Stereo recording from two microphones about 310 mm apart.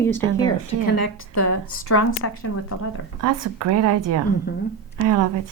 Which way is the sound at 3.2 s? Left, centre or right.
Right.